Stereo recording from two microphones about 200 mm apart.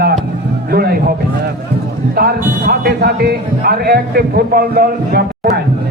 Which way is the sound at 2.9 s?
50° right (ahead or behind).